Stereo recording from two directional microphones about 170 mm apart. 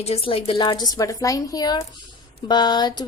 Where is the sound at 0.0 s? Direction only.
35° left (ahead or behind).